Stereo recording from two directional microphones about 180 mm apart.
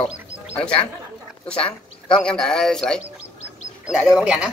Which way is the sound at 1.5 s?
30° left (ahead or behind).